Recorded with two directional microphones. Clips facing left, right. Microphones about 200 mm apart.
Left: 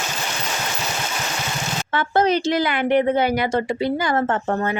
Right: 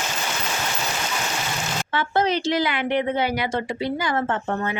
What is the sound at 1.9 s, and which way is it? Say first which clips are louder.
A woman's voice: left 4 dB; 45° left (ahead or behind).